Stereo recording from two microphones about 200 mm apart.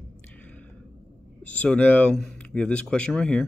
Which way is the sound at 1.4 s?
5° left (ahead or behind).